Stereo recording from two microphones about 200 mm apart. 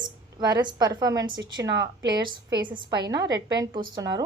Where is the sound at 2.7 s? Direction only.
55° right (ahead or behind).